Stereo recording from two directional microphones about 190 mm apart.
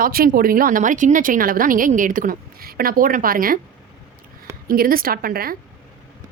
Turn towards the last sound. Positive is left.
turn(degrees=-50)  # may be behind; listen again after turning